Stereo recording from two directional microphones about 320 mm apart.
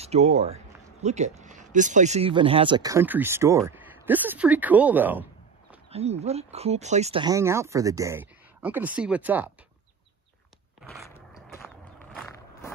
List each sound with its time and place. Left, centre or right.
0.0 s speech: right
5.9 s speech: centre
10.8 s a sound: centre